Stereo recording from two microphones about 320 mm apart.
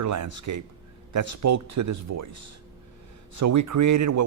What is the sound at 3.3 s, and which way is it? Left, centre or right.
Speech, right.